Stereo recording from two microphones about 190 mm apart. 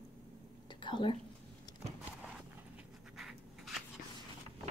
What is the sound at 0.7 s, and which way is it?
Whispering, 25° left (ahead or behind).